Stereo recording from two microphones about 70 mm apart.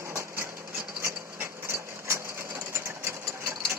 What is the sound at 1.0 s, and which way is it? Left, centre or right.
Sewing machine, right.